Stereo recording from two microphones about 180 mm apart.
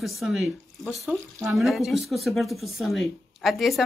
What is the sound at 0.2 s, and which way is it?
Speech, centre (ahead or behind).